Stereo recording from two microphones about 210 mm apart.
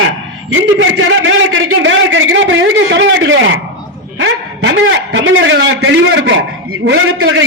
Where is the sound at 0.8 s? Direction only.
65° right (ahead or behind).